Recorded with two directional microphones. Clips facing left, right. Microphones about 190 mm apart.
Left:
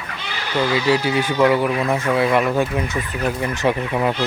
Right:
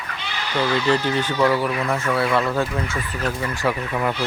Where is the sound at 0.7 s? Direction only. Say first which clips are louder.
Left 2 dB; 10° left (ahead or behind).